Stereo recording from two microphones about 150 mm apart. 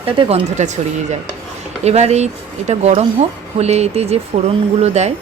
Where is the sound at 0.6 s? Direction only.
50° right (ahead or behind).